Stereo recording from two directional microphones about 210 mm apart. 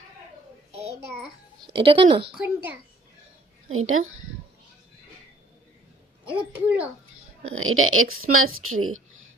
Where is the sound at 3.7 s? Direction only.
80° right.